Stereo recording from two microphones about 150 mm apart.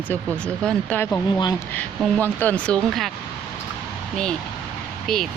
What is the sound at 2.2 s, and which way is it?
Speech, 10° left (ahead or behind).